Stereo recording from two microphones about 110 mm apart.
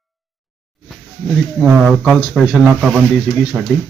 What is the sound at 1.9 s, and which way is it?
Speech, centre (ahead or behind).